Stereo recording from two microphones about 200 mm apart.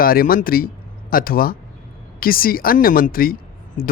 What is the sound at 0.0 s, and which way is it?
A woman's voice, 45° left (ahead or behind).